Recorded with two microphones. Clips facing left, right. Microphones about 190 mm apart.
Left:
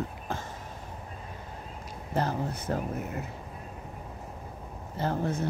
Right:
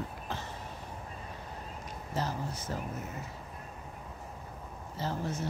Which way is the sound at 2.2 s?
60° left (ahead or behind).